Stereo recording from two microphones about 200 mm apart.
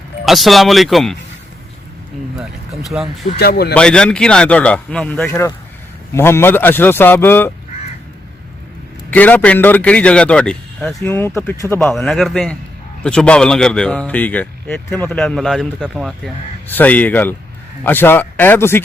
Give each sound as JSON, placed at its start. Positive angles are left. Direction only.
{"t": 0.3, "sound": "a man's voice", "side_deg": 0}
{"t": 2.9, "sound": "a man's voice", "side_deg": 0}
{"t": 3.3, "sound": "speech", "side_deg": 55}
{"t": 3.8, "sound": "a man's voice", "side_deg": 5}
{"t": 9.0, "sound": "a man's voice", "side_deg": 10}